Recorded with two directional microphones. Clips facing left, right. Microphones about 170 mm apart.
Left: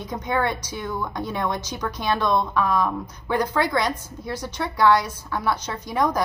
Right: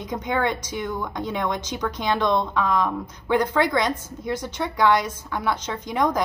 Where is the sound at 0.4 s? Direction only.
20° right (ahead or behind).